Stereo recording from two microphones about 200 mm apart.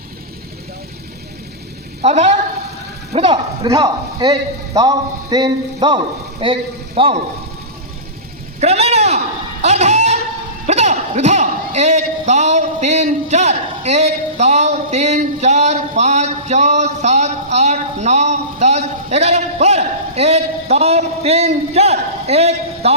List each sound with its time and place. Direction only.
2.0 s a woman's voice: 35° right (ahead or behind)
3.6 s a man's voice: 15° right (ahead or behind)
8.6 s a sound: 30° right (ahead or behind)
10.7 s speech: 35° right (ahead or behind)